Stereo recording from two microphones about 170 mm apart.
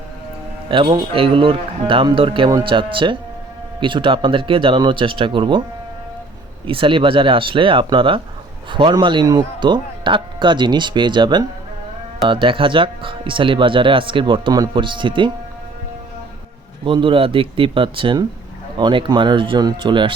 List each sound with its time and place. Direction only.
0.7 s speech: 30° right (ahead or behind)
6.7 s speech: 30° right (ahead or behind)
16.8 s speech: 30° right (ahead or behind)